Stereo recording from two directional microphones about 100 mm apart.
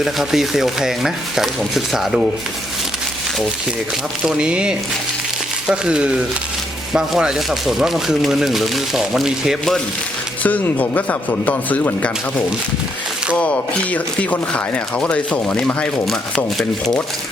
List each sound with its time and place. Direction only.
0.0 s speech: 5° right (ahead or behind)
4.2 s speech: 10° right (ahead or behind)
10.4 s speech: 15° left (ahead or behind)
13.3 s speech: 15° left (ahead or behind)